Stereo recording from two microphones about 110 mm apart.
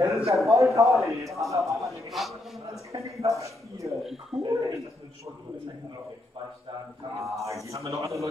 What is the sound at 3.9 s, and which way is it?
Speech, centre (ahead or behind).